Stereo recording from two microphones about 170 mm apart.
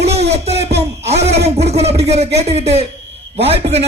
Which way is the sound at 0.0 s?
40° right (ahead or behind).